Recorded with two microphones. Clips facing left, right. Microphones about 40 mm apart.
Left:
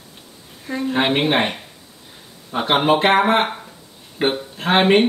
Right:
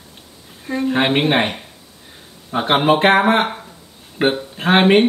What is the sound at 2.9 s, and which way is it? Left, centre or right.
Speech, right.